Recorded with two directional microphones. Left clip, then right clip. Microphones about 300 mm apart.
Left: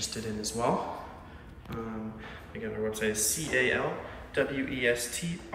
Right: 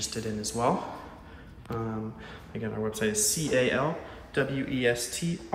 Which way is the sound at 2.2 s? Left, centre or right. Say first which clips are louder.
Right 1 dB; centre.